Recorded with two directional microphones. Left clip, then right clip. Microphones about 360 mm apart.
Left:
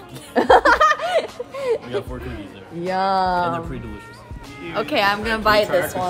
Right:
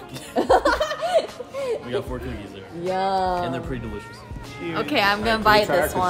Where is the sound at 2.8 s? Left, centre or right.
Centre.